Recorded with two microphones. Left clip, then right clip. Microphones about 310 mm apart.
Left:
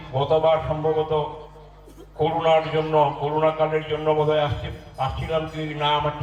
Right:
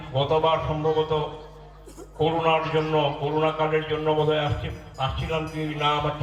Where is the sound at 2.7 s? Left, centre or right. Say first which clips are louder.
Left 3 dB; centre.